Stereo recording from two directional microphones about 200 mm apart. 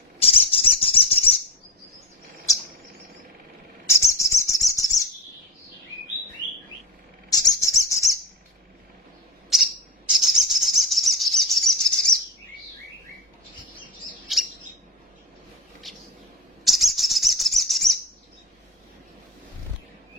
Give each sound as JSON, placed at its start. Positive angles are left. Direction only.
{"t": 0.2, "sound": "bird", "side_deg": 30}
{"t": 3.8, "sound": "bird", "side_deg": 15}
{"t": 7.3, "sound": "bird", "side_deg": 20}
{"t": 9.5, "sound": "bird", "side_deg": 0}
{"t": 14.3, "sound": "bird", "side_deg": 0}
{"t": 16.6, "sound": "bird", "side_deg": 0}